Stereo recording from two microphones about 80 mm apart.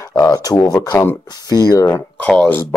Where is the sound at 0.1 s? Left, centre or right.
Left.